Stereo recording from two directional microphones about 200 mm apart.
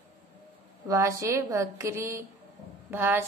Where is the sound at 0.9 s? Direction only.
15° right (ahead or behind).